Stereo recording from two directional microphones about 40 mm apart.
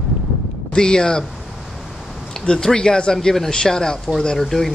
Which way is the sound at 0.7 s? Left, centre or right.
Centre.